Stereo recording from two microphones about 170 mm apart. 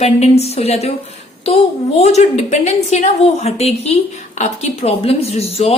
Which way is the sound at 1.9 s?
40° left (ahead or behind).